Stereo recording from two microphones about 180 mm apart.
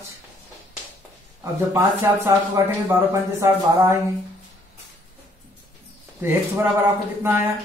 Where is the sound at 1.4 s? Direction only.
15° right (ahead or behind).